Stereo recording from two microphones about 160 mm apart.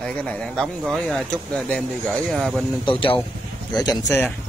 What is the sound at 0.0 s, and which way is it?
Speech, 5° left (ahead or behind).